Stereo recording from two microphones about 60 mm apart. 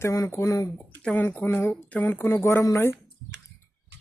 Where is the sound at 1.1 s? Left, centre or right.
Left.